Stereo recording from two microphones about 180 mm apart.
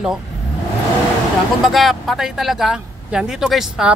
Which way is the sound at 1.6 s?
Centre (ahead or behind).